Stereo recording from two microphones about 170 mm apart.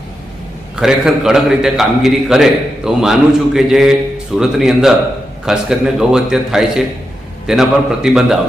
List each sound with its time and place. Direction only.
0.8 s a man's voice: 5° right (ahead or behind)